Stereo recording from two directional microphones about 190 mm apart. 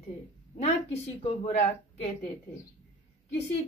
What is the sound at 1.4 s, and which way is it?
Speech, 35° left (ahead or behind).